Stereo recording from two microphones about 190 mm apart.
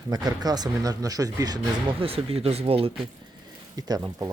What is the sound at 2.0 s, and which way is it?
Speech, 30° right (ahead or behind).